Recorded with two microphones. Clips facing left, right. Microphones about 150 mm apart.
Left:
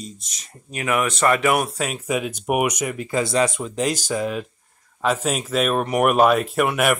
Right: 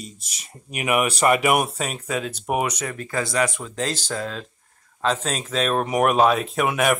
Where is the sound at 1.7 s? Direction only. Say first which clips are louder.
Left 2 dB; centre (ahead or behind).